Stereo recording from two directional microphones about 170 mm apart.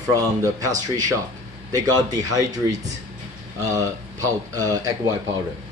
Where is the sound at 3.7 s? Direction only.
20° right (ahead or behind).